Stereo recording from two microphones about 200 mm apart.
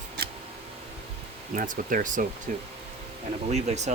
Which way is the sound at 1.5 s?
45° right (ahead or behind).